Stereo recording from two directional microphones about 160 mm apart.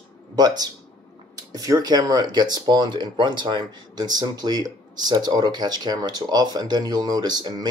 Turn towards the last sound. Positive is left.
turn(degrees=-25)  # may be behind; listen again after turning